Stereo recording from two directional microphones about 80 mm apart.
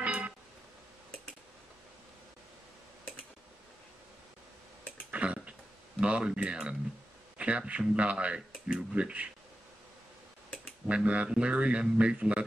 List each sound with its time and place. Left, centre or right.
0.0 s music: centre
5.1 s a sound: centre
5.9 s speech: centre
10.9 s speech: centre